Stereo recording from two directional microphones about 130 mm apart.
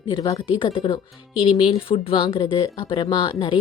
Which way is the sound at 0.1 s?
35° left (ahead or behind).